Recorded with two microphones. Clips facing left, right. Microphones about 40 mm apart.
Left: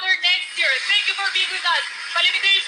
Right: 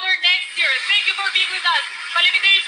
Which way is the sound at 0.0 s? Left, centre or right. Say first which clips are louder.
Right 2 dB; right.